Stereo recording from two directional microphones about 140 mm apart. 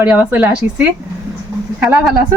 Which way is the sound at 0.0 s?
10° right (ahead or behind).